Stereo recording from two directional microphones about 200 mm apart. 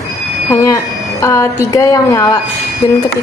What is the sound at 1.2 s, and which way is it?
A woman's voice, 15° left (ahead or behind).